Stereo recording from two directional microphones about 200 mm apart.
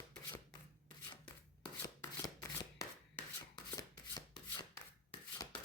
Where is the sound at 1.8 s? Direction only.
15° left (ahead or behind).